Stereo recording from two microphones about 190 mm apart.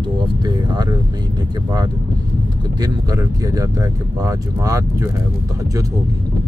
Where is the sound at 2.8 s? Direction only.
20° right (ahead or behind).